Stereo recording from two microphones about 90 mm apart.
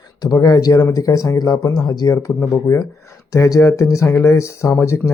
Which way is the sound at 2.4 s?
30° left (ahead or behind).